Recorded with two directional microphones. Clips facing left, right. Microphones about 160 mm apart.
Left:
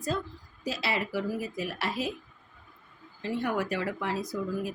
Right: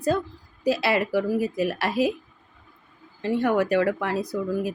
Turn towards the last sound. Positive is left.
turn(degrees=-60)  # may be behind; listen again after turning